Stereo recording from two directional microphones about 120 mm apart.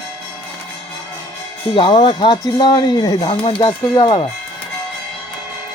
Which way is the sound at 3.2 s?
50° left (ahead or behind).